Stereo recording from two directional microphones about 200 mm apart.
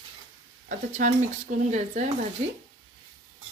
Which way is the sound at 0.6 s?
40° right (ahead or behind).